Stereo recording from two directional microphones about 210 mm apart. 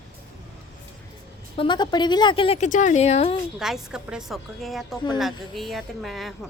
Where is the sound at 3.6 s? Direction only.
5° right (ahead or behind).